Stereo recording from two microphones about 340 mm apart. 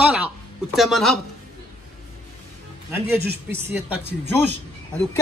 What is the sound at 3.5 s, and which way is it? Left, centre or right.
Speech, centre.